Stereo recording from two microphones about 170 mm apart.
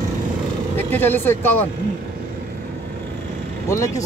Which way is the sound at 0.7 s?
10° left (ahead or behind).